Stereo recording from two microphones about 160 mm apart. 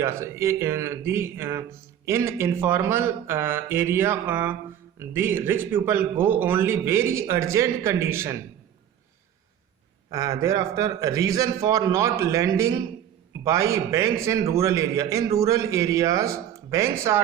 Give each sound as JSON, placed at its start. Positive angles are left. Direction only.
{"t": 0.0, "sound": "a man's voice", "side_deg": -15}
{"t": 10.1, "sound": "a man's voice", "side_deg": -20}